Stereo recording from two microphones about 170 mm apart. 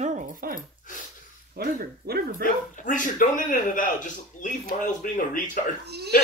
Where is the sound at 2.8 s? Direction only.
50° left (ahead or behind).